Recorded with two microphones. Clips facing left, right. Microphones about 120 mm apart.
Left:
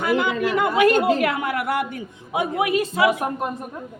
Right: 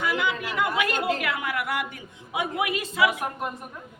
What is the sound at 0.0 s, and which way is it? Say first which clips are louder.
A woman's voice: left 6 dB; 45° left (ahead or behind).